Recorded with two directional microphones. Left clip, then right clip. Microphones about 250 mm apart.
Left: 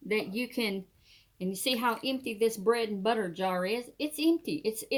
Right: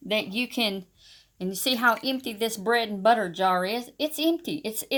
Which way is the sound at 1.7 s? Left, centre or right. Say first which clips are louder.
Right 7 dB; right.